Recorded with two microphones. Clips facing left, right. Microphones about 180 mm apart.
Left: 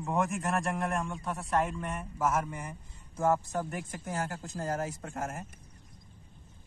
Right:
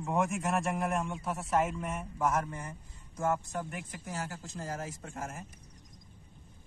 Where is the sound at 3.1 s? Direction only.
30° left (ahead or behind); by 5.4 s 55° left (ahead or behind).